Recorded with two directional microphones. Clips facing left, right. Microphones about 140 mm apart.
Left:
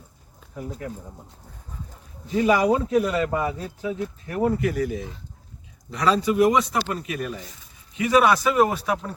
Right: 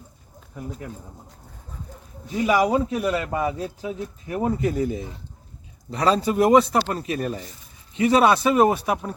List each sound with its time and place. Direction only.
2.5 s speech: 10° right (ahead or behind)
3.8 s speech: 25° right (ahead or behind)